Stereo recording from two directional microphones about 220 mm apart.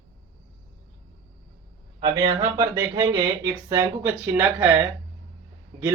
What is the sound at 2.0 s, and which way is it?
Speech, 20° right (ahead or behind).